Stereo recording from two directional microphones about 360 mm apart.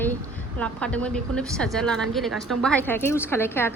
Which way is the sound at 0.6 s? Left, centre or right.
Centre.